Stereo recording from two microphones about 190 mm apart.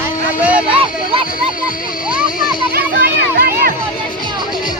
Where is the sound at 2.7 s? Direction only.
55° right (ahead or behind).